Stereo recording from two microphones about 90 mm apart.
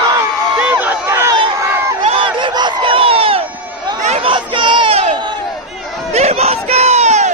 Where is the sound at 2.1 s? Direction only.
70° right (ahead or behind); by 3.4 s 90° right.